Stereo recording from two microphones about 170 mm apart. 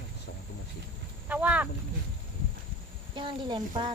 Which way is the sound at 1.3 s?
10° right (ahead or behind).